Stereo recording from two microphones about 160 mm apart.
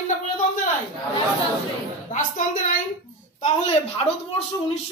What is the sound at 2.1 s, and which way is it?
Speech, 50° left (ahead or behind).